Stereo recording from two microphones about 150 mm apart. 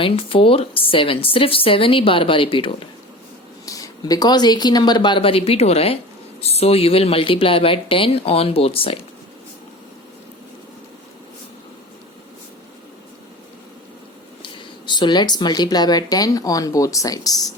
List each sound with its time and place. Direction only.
0.0 s a woman's voice: 35° left (ahead or behind)
3.7 s a woman's voice: 25° left (ahead or behind)
14.4 s speech: 30° left (ahead or behind)